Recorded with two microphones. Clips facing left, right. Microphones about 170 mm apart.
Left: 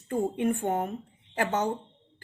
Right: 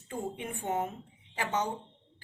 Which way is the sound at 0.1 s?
55° left (ahead or behind).